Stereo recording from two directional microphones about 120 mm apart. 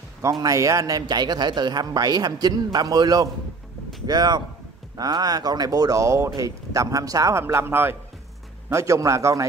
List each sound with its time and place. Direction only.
0.2 s a man's voice: 30° right (ahead or behind)